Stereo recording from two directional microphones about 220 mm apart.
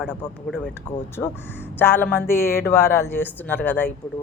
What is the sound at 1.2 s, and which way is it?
Speech, 10° left (ahead or behind).